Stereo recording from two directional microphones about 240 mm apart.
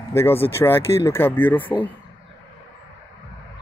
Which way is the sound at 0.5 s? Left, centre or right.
Centre.